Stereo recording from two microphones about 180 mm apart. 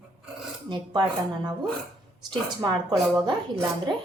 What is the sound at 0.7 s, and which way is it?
Speech, 25° right (ahead or behind).